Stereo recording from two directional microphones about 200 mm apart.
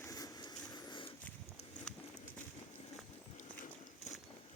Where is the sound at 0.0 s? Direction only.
15° left (ahead or behind).